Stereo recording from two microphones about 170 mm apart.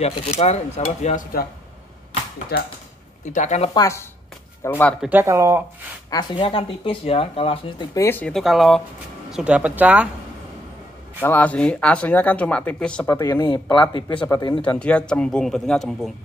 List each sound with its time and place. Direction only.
0.0 s speech: 35° left (ahead or behind)
2.5 s speech: 70° left (ahead or behind)
3.3 s speech: 40° left (ahead or behind)
3.7 s speech: 20° left (ahead or behind)
5.2 s speech: 20° right (ahead or behind)
6.0 s speech: 30° left (ahead or behind)
7.9 s a man's voice: 15° left (ahead or behind); by 10.0 s 10° right (ahead or behind)
11.1 s speech: 10° left (ahead or behind)
13.0 s speech: 20° left (ahead or behind)
14.6 s a man's voice: 5° left (ahead or behind)